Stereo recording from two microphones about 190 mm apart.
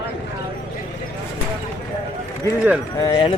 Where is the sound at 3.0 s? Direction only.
20° left (ahead or behind).